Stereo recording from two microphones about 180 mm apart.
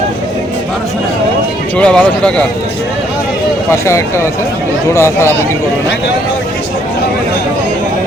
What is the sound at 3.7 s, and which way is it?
Speech, 15° left (ahead or behind).